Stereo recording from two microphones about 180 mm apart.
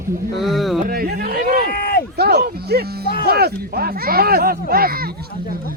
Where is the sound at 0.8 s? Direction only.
55° right (ahead or behind).